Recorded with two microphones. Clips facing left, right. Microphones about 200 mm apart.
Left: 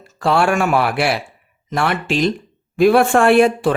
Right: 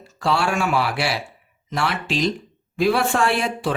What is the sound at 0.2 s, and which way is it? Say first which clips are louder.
Speech: left 5 dB; 55° left (ahead or behind).